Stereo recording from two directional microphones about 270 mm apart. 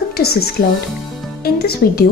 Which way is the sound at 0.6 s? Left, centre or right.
Left.